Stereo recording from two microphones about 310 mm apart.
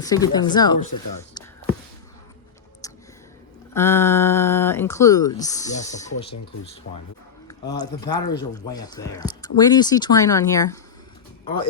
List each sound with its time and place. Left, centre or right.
0.0 s speech: centre
2.8 s a sound: centre
3.8 s speech: centre
7.4 s speech: centre